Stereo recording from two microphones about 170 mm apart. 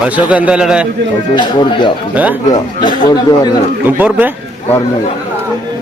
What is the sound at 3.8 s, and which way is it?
Speech, 10° right (ahead or behind).